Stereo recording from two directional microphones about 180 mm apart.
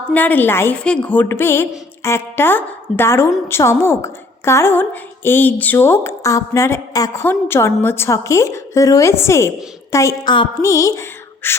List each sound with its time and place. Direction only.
0.1 s a woman's voice: 10° left (ahead or behind)